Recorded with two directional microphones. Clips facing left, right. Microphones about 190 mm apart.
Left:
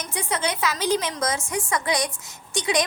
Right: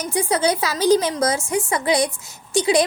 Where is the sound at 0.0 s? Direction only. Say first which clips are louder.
Right 7 dB; 35° right (ahead or behind).